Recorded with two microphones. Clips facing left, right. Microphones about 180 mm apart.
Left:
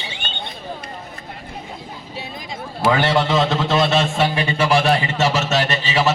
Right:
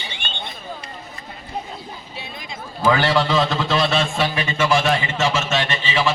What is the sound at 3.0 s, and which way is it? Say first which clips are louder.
A man's voice: left 1 dB; 20° left (ahead or behind).